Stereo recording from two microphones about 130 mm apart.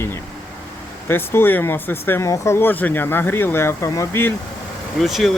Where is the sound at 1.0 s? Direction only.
15° left (ahead or behind).